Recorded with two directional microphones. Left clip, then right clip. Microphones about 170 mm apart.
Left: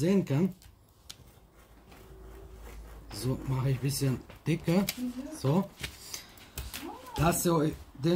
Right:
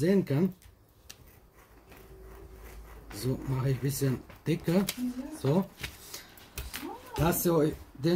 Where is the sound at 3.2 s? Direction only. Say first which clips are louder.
Right 1 dB; 20° left (ahead or behind).